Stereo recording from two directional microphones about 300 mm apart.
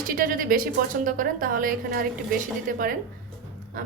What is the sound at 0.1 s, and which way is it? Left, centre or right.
A woman's voice, right.